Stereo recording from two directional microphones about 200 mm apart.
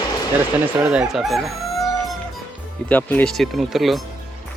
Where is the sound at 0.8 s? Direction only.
5° right (ahead or behind).